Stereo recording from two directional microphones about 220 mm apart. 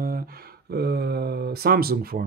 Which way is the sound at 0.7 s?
45° right (ahead or behind).